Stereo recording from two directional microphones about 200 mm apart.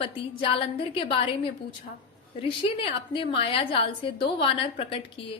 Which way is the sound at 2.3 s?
25° left (ahead or behind).